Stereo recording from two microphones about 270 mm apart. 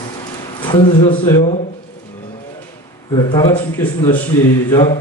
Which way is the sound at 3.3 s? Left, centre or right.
Centre.